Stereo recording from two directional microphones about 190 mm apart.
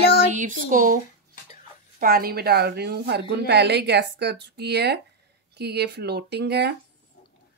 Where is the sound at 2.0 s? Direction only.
50° right (ahead or behind).